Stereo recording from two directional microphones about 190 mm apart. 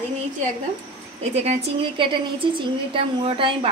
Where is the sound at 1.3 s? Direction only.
35° right (ahead or behind).